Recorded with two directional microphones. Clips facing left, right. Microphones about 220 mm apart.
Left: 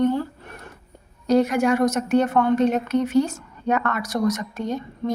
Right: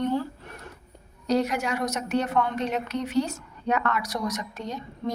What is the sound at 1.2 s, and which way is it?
A woman's voice, 50° left (ahead or behind).